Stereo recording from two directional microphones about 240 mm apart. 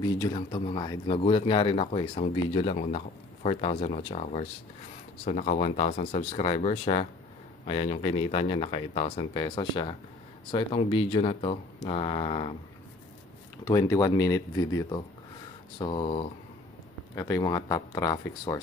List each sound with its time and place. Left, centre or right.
0.0 s speech: centre
13.7 s speech: centre